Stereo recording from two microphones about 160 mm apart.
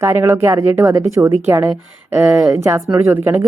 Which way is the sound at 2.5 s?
20° right (ahead or behind).